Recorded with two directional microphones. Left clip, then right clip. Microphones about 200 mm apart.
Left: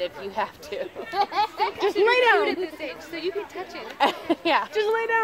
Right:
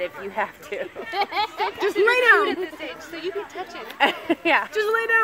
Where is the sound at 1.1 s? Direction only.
45° right (ahead or behind).